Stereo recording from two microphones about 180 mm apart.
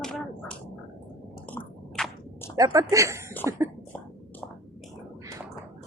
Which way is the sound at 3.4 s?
15° right (ahead or behind).